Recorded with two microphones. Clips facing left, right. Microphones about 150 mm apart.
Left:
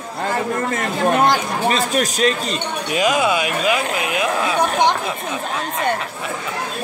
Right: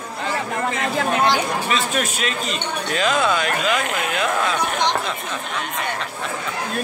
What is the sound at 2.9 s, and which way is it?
Speech, 10° left (ahead or behind).